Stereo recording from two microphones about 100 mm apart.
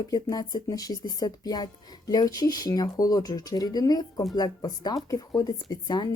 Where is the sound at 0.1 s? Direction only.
40° left (ahead or behind).